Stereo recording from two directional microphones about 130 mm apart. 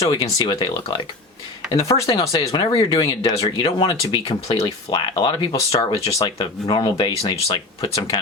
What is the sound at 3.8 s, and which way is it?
Speech, 30° left (ahead or behind).